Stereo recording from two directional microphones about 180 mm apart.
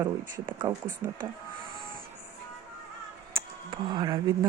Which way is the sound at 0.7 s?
15° right (ahead or behind).